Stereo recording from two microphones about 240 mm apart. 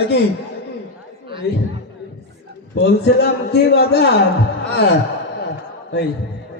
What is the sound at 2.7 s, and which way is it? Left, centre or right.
A man's voice, left.